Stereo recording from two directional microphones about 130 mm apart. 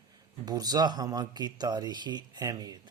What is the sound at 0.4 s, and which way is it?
Speech, 30° right (ahead or behind).